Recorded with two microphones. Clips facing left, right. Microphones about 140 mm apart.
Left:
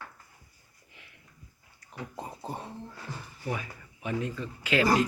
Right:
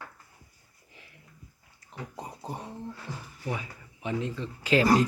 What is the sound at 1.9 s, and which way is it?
Speech, 15° right (ahead or behind).